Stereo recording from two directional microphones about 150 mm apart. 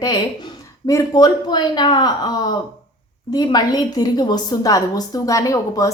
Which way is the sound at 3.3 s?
25° left (ahead or behind).